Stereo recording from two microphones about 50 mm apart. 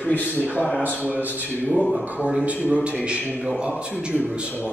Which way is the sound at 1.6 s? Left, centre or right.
Left.